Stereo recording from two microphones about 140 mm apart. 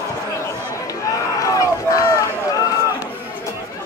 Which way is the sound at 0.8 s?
25° left (ahead or behind).